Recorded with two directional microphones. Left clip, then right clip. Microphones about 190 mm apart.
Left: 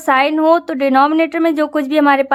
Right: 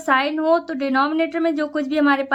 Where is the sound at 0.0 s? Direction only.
35° left (ahead or behind).